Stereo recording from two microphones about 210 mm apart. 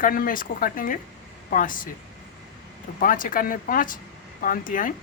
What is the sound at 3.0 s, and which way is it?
A woman's voice, 40° left (ahead or behind).